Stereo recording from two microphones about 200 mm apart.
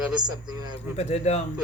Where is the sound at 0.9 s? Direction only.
35° left (ahead or behind).